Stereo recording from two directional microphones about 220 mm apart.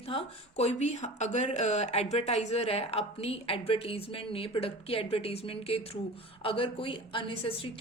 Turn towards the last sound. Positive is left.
turn(degrees=25)  # may be behind; listen again after turning